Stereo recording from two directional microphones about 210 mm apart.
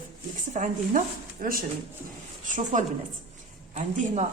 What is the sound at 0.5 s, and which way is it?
A woman's voice, 40° right (ahead or behind).